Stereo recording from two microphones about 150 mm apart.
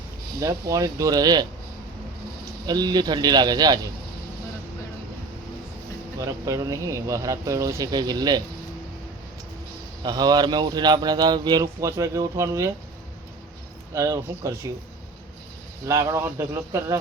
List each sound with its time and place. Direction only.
0.3 s a man's voice: 20° right (ahead or behind)
6.1 s speech: 20° right (ahead or behind)
10.0 s speech: 25° right (ahead or behind)
13.9 s speech: 20° right (ahead or behind)
15.9 s speech: 20° right (ahead or behind)